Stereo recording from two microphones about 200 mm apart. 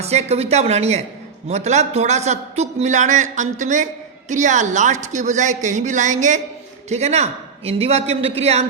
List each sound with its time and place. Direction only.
0.0 s a man's voice: 35° right (ahead or behind)